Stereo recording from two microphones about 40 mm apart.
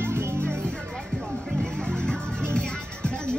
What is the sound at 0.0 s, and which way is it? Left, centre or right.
Music, right.